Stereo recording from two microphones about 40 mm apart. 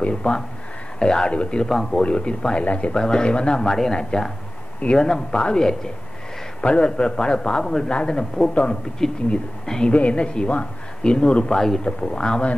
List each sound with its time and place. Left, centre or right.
0.0 s a man's voice: left
1.7 s speech: centre
2.0 s a man's voice: left
3.0 s a man's voice: centre
6.6 s a man's voice: left
9.7 s speech: centre
9.9 s a man's voice: left